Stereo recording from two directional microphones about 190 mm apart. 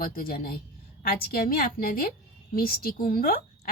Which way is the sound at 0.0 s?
50° left (ahead or behind).